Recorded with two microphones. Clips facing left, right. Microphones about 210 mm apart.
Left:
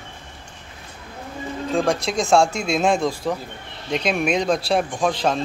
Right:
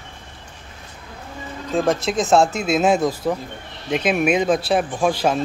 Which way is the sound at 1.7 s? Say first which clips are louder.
Right 2 dB; 5° right (ahead or behind).